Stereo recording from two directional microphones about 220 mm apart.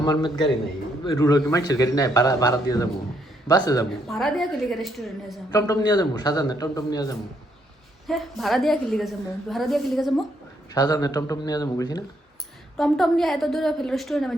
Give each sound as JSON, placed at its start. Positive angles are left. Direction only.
{"t": 0.0, "sound": "a man's voice", "side_deg": 20}
{"t": 4.0, "sound": "a woman's voice", "side_deg": 0}
{"t": 5.5, "sound": "a man's voice", "side_deg": 15}
{"t": 8.0, "sound": "a woman's voice", "side_deg": 0}
{"t": 10.8, "sound": "a man's voice", "side_deg": 15}
{"t": 12.7, "sound": "a woman's voice", "side_deg": 0}